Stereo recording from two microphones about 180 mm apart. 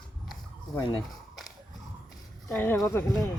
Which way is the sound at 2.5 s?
5° left (ahead or behind).